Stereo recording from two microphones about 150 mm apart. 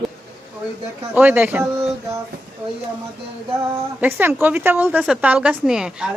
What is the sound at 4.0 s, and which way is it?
A woman's voice, 15° right (ahead or behind).